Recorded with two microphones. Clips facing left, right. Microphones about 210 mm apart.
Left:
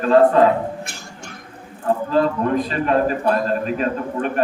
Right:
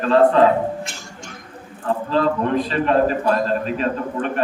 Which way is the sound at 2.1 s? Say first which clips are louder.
Even; 45° left (ahead or behind).